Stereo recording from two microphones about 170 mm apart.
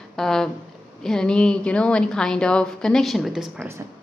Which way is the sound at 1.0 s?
5° left (ahead or behind).